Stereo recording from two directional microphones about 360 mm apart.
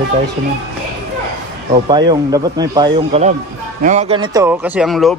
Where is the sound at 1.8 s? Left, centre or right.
Centre.